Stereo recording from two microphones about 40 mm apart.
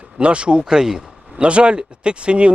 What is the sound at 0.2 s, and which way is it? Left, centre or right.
Speech, right.